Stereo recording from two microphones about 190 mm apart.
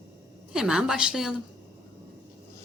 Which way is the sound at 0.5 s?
5° right (ahead or behind).